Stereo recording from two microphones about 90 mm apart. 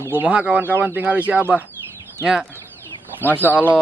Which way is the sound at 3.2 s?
20° left (ahead or behind).